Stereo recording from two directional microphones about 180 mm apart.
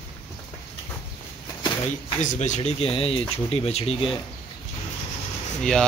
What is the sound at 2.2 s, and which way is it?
Speech, 40° left (ahead or behind).